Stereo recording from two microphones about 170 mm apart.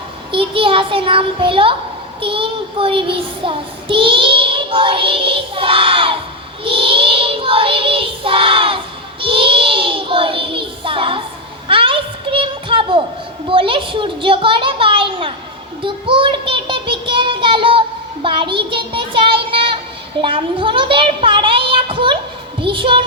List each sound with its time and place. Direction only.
0.3 s child singing: 30° right (ahead or behind)
11.7 s a sound: 30° right (ahead or behind)
13.5 s a child's voice: 30° right (ahead or behind)
15.8 s child singing: 30° right (ahead or behind)
20.2 s a sound: 30° right (ahead or behind)
22.6 s a woman's voice: 30° right (ahead or behind)